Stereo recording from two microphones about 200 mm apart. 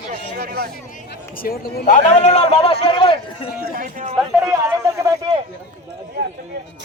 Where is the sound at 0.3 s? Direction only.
50° right (ahead or behind).